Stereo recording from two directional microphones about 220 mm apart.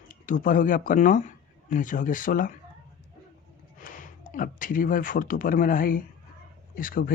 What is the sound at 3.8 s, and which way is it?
Speech, 40° left (ahead or behind).